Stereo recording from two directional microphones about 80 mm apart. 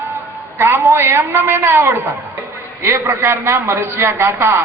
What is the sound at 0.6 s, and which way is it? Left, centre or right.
A man's voice, right.